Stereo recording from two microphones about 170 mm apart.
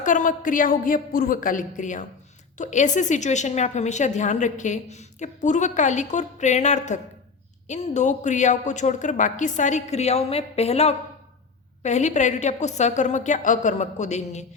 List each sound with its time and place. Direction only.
0.0 s a woman's voice: 50° left (ahead or behind)